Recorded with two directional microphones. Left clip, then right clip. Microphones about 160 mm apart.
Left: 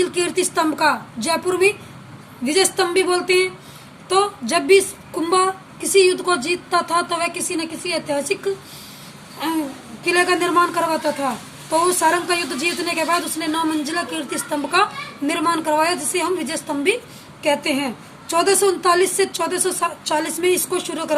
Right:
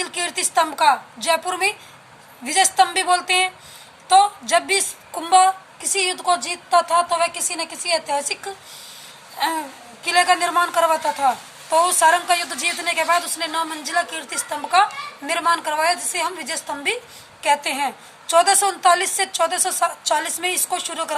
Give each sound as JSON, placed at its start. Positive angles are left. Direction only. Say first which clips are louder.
{"t": 0.0, "sound": "a woman's voice", "louder": "left 5 dB", "side_deg": -20}
{"t": 10.0, "sound": "a woman's voice", "louder": "right 1 dB", "side_deg": -20}